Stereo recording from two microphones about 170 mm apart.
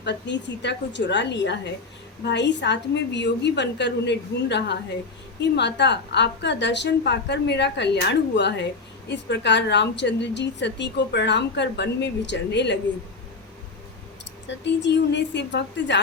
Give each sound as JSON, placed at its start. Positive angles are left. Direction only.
{"t": 0.0, "sound": "a woman's voice", "side_deg": 90}
{"t": 14.4, "sound": "a woman's voice", "side_deg": 90}